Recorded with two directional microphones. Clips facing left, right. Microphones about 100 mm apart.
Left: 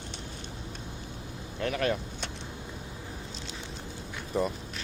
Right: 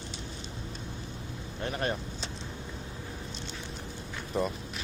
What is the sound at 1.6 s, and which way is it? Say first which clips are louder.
Vehicle: left 3 dB; 90° left.